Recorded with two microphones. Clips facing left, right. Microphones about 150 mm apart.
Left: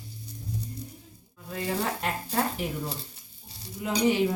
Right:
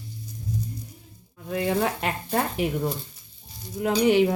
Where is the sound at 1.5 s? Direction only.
75° right (ahead or behind).